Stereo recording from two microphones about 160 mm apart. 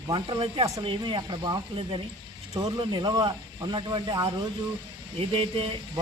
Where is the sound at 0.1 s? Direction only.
30° right (ahead or behind).